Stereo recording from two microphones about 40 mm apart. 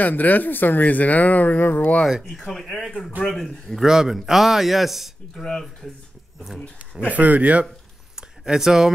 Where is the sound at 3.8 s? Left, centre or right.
Centre.